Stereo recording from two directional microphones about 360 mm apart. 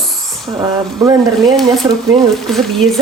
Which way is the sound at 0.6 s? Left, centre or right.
Centre.